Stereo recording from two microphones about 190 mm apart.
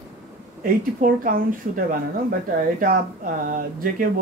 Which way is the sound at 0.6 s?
50° right (ahead or behind).